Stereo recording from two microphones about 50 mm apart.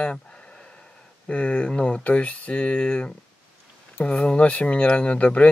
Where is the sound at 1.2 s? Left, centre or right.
Left.